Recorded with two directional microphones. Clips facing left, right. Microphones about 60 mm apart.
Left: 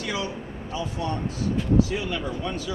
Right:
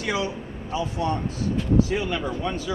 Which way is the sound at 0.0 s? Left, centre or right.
Right.